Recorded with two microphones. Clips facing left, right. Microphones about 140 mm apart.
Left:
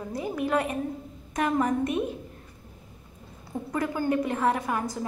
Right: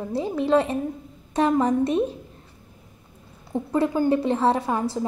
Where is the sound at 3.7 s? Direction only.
30° right (ahead or behind).